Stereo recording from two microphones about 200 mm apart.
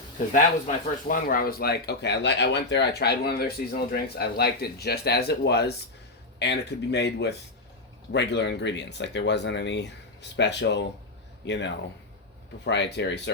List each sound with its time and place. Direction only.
1.0 s speech: 45° left (ahead or behind); by 13.3 s 60° left (ahead or behind)